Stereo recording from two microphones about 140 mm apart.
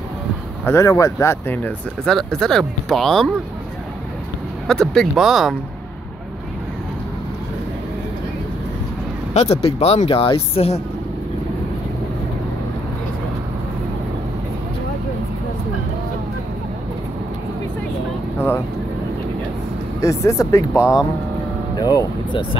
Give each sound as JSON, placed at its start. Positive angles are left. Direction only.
{"t": 0.7, "sound": "speech", "side_deg": 20}
{"t": 2.1, "sound": "speech", "side_deg": 5}
{"t": 4.6, "sound": "speech", "side_deg": 5}
{"t": 9.3, "sound": "speech", "side_deg": 50}
{"t": 20.0, "sound": "speech", "side_deg": 20}